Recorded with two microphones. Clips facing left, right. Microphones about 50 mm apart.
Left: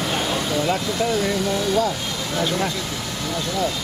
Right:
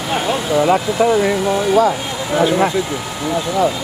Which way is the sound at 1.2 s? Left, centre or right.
Right.